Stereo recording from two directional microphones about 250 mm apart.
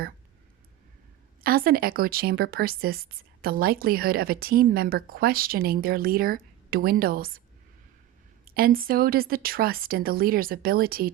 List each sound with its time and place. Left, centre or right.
1.5 s speech: right
8.4 s speech: right